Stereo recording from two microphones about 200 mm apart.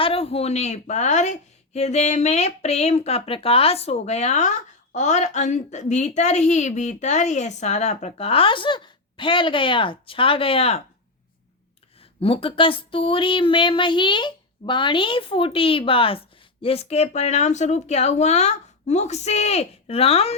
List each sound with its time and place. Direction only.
0.0 s a woman's voice: 30° left (ahead or behind)
12.2 s speech: 25° left (ahead or behind)